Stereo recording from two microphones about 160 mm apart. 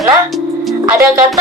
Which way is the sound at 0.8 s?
15° right (ahead or behind).